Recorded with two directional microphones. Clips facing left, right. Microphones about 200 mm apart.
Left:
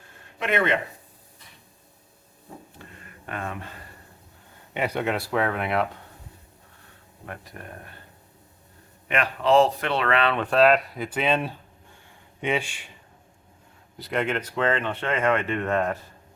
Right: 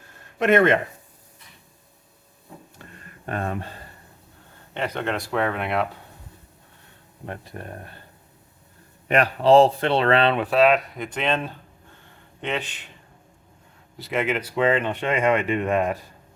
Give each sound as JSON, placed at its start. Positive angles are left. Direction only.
{"t": 0.3, "sound": "speech", "side_deg": -45}
{"t": 3.2, "sound": "speech", "side_deg": -40}
{"t": 4.7, "sound": "speech", "side_deg": 10}
{"t": 7.3, "sound": "speech", "side_deg": -30}
{"t": 9.0, "sound": "speech", "side_deg": -40}
{"t": 10.3, "sound": "speech", "side_deg": -5}
{"t": 13.9, "sound": "speech", "side_deg": 0}